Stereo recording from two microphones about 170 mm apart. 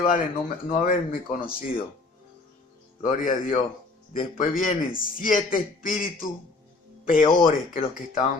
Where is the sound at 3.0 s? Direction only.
50° left (ahead or behind).